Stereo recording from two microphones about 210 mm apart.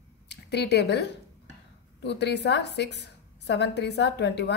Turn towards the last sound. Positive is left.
turn(degrees=55)  # may be behind; listen again after turning